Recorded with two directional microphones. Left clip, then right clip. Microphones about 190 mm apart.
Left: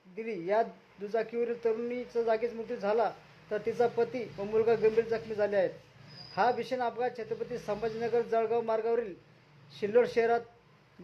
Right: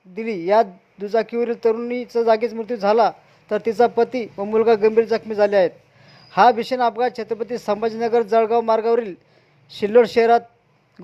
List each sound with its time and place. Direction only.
0.2 s a man's voice: 40° right (ahead or behind)